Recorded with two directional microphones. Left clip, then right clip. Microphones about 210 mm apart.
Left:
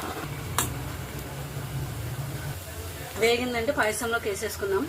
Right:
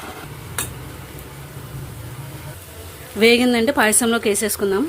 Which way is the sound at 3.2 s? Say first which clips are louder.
Right 10 dB; 50° right (ahead or behind).